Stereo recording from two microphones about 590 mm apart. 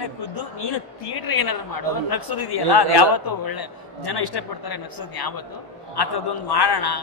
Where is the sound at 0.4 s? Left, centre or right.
Left.